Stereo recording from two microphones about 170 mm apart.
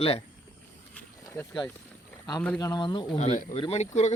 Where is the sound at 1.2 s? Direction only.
20° left (ahead or behind).